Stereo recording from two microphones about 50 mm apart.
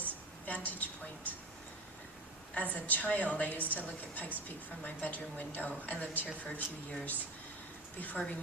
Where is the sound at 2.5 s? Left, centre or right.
Left.